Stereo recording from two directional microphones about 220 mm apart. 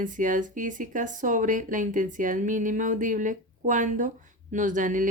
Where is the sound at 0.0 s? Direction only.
35° right (ahead or behind).